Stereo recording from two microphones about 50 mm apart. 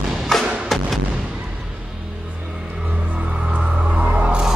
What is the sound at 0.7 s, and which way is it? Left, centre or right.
Artillery fire, centre.